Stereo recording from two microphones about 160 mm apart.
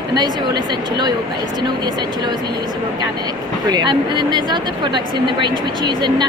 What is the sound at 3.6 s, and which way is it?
A woman's voice, 25° right (ahead or behind).